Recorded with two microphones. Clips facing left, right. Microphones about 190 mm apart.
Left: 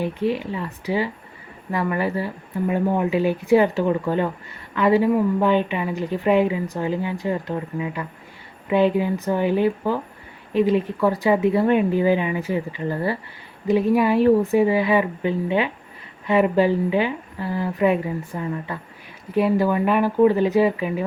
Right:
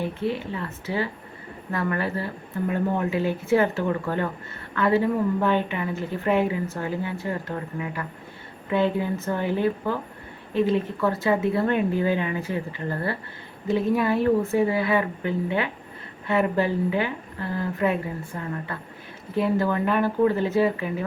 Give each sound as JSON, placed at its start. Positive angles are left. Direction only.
{"t": 0.0, "sound": "a woman's voice", "side_deg": 15}
{"t": 19.3, "sound": "a woman's voice", "side_deg": 15}